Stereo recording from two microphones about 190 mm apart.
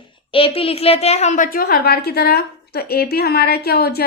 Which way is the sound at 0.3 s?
30° left (ahead or behind).